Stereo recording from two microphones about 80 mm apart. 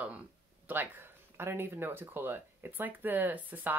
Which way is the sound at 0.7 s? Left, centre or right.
Right.